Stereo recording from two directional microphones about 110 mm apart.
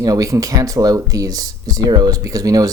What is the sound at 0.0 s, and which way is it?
Speech, 30° right (ahead or behind).